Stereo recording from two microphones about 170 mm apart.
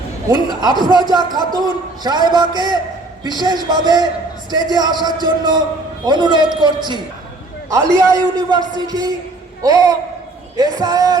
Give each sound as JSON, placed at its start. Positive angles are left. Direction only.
{"t": 0.8, "sound": "a man's voice", "side_deg": -25}